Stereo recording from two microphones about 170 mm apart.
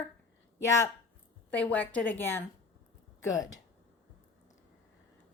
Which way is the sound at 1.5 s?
10° left (ahead or behind).